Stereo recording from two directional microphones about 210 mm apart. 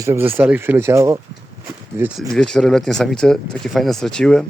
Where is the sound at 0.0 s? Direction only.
10° right (ahead or behind).